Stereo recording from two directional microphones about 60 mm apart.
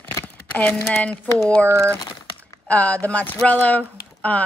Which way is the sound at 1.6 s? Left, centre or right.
Right.